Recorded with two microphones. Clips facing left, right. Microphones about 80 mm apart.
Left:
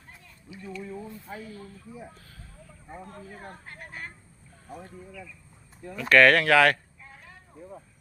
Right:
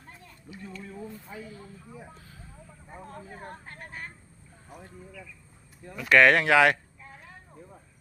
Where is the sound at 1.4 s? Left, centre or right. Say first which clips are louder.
Left 1 dB; centre.